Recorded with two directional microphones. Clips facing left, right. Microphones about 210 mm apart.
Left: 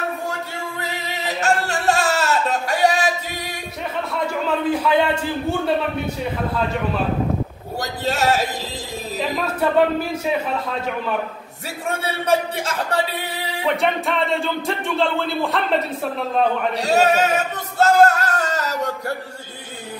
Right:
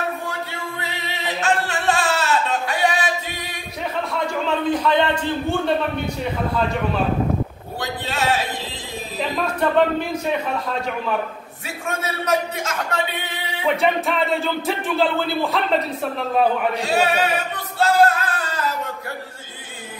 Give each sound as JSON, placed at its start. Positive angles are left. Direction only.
{"t": 0.7, "sound": "a sound", "side_deg": 40}
{"t": 4.1, "sound": "a man's voice", "side_deg": 5}
{"t": 7.8, "sound": "speech", "side_deg": 40}
{"t": 9.6, "sound": "music", "side_deg": 5}
{"t": 11.6, "sound": "speech", "side_deg": 30}
{"t": 13.7, "sound": "music", "side_deg": 0}
{"t": 16.7, "sound": "male singing", "side_deg": 40}